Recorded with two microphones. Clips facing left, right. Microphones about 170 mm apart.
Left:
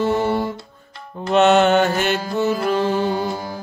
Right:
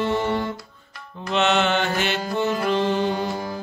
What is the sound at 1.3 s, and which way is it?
Music, 45° left (ahead or behind).